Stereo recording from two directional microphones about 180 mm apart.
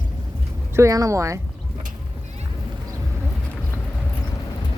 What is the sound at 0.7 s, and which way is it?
Speech, 20° right (ahead or behind).